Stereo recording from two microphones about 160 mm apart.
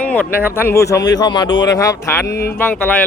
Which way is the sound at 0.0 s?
10° left (ahead or behind).